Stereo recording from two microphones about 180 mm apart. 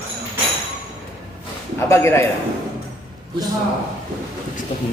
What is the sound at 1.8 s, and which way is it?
Speech, 15° left (ahead or behind).